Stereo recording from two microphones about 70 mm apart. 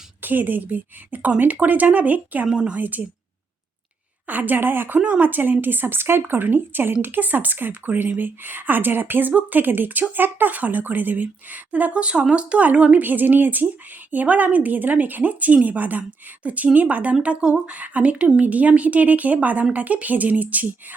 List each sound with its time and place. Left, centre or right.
0.2 s speech: right
2.5 s a woman's voice: centre
2.7 s speech: right
4.3 s speech: right